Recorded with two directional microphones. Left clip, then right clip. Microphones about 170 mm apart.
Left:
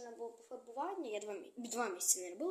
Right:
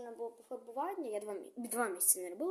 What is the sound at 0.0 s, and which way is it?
A woman's voice, 35° right (ahead or behind).